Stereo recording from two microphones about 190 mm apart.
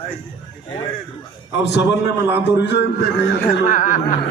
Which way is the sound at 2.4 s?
65° left (ahead or behind).